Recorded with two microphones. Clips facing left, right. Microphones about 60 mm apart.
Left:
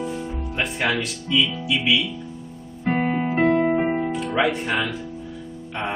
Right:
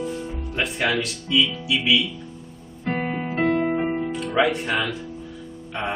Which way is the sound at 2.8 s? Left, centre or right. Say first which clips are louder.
Left 4 dB; centre.